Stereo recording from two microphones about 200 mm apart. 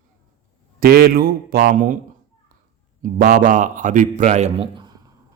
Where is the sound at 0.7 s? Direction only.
50° right (ahead or behind).